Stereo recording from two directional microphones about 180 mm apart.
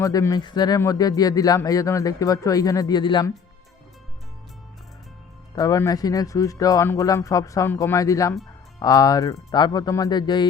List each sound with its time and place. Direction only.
0.0 s speech: 20° left (ahead or behind)
5.5 s speech: 20° left (ahead or behind)